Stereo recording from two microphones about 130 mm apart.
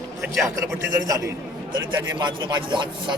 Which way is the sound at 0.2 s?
Centre (ahead or behind).